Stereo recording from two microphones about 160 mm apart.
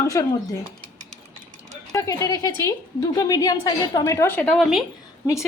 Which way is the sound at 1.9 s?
20° left (ahead or behind).